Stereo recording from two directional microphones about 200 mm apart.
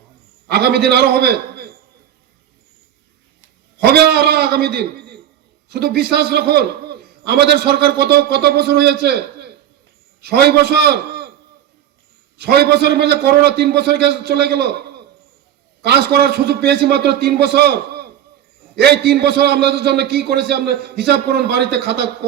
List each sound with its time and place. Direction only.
0.4 s a man's voice: 55° right (ahead or behind)
3.8 s a man's voice: 50° right (ahead or behind)
12.4 s a man's voice: 55° right (ahead or behind)